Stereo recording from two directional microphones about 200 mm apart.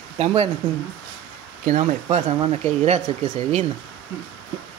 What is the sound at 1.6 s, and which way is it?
Speech, 40° right (ahead or behind).